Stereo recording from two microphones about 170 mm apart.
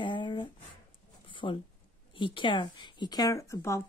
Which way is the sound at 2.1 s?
30° left (ahead or behind).